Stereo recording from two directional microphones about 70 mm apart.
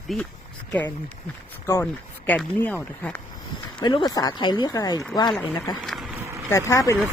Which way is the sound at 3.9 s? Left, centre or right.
Left.